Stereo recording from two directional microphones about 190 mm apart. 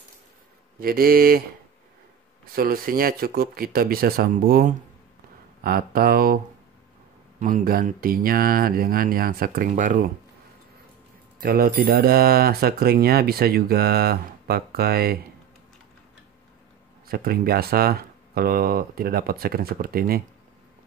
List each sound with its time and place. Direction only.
0.7 s speech: 50° right (ahead or behind)
2.5 s speech: 50° right (ahead or behind)
11.4 s speech: 50° right (ahead or behind)
17.1 s speech: 50° right (ahead or behind)